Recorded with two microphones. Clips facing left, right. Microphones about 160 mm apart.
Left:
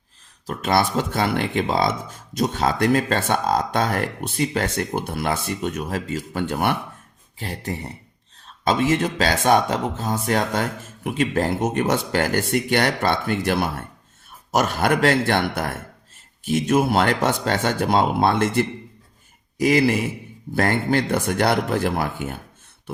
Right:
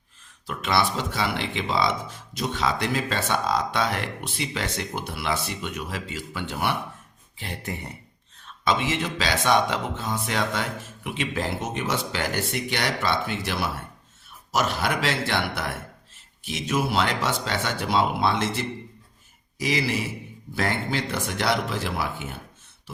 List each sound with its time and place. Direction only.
0.4 s speech: 40° left (ahead or behind)
7.3 s speech: 40° left (ahead or behind)